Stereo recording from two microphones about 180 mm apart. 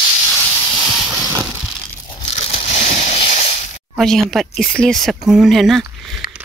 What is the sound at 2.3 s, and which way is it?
Crushing, 35° left (ahead or behind).